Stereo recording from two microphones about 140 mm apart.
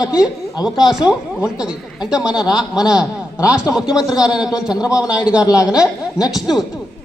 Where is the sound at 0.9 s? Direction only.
5° right (ahead or behind).